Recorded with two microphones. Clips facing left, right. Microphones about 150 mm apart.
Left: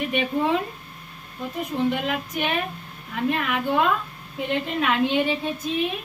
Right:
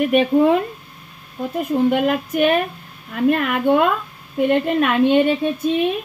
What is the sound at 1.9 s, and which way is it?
A woman's voice, 55° right (ahead or behind).